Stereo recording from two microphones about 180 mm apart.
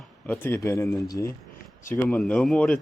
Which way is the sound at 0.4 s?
15° left (ahead or behind).